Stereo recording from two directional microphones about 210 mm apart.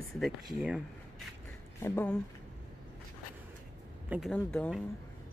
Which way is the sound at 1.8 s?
10° left (ahead or behind).